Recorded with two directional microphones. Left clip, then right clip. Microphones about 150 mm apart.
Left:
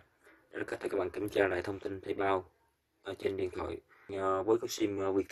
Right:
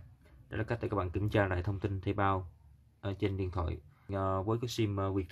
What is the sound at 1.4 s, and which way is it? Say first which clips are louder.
Speech: left 1 dB; 5° left (ahead or behind).